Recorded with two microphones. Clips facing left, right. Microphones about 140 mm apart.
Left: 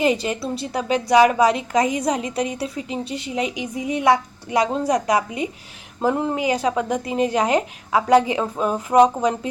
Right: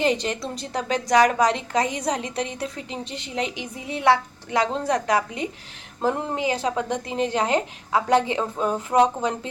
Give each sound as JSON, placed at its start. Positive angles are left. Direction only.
{"t": 0.0, "sound": "a woman's voice", "side_deg": 10}
{"t": 2.0, "sound": "a woman's voice", "side_deg": -35}
{"t": 2.5, "sound": "a woman's voice", "side_deg": 10}